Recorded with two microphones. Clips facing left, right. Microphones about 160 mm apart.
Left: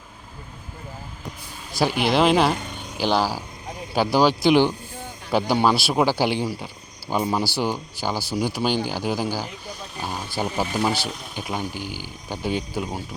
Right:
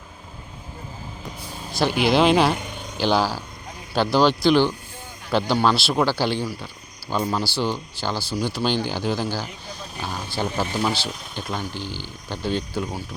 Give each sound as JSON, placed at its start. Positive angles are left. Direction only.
{"t": 1.8, "sound": "speech", "side_deg": 0}